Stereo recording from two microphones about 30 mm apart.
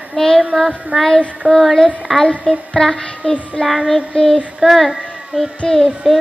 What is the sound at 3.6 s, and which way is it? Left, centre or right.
Child singing, left.